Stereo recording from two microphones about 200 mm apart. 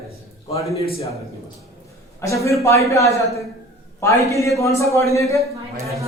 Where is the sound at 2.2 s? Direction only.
15° left (ahead or behind).